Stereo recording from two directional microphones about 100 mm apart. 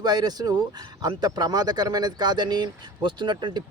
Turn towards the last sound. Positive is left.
turn(degrees=-50)  # may be behind; listen again after turning